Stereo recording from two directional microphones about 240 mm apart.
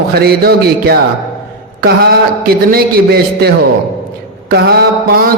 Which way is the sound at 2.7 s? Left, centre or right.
Right.